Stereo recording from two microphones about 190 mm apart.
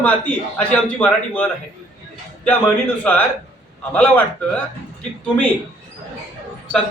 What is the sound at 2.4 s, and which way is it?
A man's voice, 10° left (ahead or behind).